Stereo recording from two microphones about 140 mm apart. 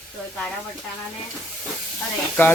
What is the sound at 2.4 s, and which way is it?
Speech, 15° left (ahead or behind).